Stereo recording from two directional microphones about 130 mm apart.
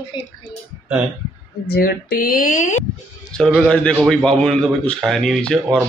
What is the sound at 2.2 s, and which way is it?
Speech, 90° left.